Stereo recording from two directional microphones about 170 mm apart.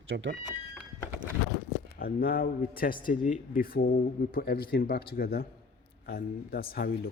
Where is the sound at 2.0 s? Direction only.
60° left (ahead or behind).